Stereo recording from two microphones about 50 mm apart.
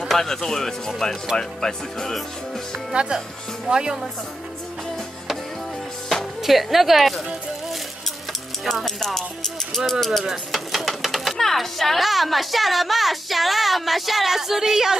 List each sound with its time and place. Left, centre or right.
0.1 s speech: centre
2.9 s speech: centre
6.0 s speech: centre
8.3 s speech: centre